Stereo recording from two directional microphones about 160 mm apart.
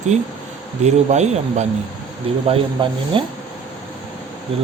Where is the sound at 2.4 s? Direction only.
35° right (ahead or behind).